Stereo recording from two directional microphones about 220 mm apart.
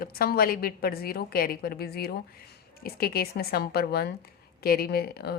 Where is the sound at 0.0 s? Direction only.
45° left (ahead or behind).